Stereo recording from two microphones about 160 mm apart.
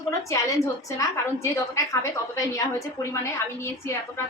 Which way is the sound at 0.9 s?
20° left (ahead or behind).